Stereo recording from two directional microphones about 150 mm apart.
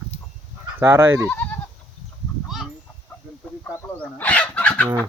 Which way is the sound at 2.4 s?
Centre (ahead or behind).